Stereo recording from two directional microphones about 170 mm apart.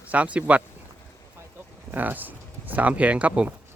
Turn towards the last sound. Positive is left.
turn(degrees=-5)  # may be behind; listen again after turning